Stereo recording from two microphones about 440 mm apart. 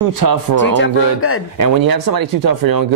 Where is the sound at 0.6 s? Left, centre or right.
Left.